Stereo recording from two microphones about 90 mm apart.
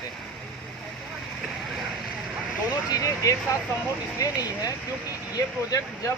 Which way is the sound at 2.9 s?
40° left (ahead or behind).